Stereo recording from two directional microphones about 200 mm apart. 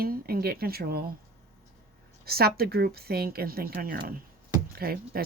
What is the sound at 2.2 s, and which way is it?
Speech, 50° right (ahead or behind).